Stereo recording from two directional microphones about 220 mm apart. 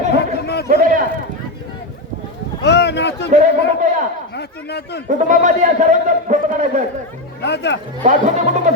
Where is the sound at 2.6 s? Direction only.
50° left (ahead or behind).